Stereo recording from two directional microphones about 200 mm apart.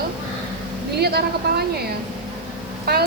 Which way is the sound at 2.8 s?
50° right (ahead or behind).